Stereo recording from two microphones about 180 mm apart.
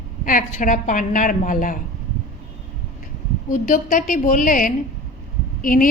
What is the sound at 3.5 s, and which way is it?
A woman's voice, 50° left (ahead or behind).